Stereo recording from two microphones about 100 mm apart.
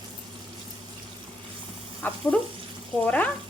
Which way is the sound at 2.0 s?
15° left (ahead or behind).